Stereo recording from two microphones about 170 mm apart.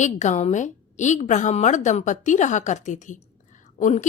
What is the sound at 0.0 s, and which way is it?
A woman's voice, 45° left (ahead or behind).